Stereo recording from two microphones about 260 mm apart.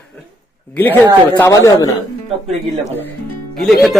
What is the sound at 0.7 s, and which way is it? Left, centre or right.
Speech, centre.